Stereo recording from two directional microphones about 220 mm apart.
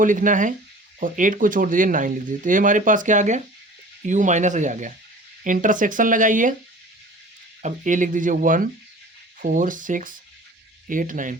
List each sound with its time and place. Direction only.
0.0 s speech: 35° right (ahead or behind)
7.6 s speech: 35° right (ahead or behind)